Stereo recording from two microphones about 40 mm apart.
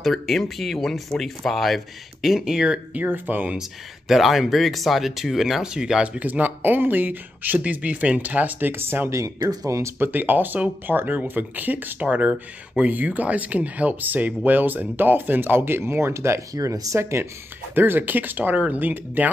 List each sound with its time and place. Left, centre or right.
0.0 s speech: centre
2.2 s speech: centre
3.1 s speech: right
4.1 s speech: centre
5.6 s speech: centre
6.1 s speech: right
6.4 s speech: right
8.5 s speech: right
9.9 s speech: right
17.7 s speech: right
18.6 s speech: right